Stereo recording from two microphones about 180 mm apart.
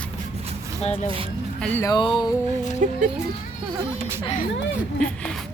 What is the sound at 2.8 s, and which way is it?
Speech, 45° right (ahead or behind).